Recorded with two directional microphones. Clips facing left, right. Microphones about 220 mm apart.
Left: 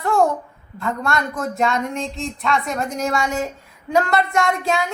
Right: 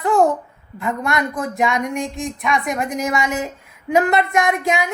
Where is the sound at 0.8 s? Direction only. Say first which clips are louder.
Right 1 dB; 15° right (ahead or behind).